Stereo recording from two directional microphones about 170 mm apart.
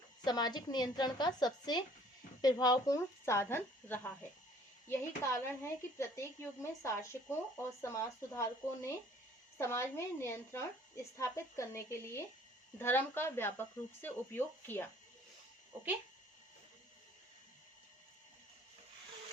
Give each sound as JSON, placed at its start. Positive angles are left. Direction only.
{"t": 0.3, "sound": "a woman's voice", "side_deg": 25}
{"t": 12.8, "sound": "speech", "side_deg": 15}